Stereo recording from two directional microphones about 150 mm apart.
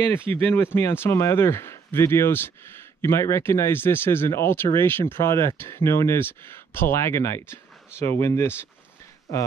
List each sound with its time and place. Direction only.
0.3 s speech: 15° left (ahead or behind)